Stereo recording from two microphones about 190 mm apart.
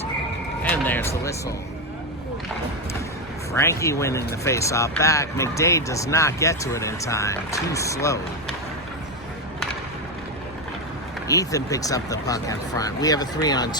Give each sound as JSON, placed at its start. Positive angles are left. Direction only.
{"t": 0.9, "sound": "speech", "side_deg": 10}
{"t": 3.5, "sound": "speech", "side_deg": 15}
{"t": 11.3, "sound": "speech", "side_deg": 15}